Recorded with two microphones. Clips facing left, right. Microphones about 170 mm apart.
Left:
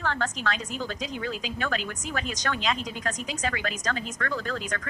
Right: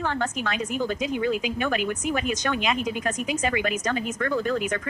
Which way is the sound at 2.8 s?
55° right (ahead or behind).